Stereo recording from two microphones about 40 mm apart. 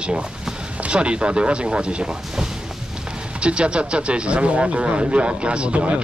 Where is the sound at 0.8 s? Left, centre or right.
Right.